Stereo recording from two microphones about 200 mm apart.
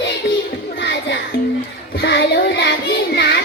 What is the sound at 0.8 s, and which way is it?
Music, 60° left (ahead or behind).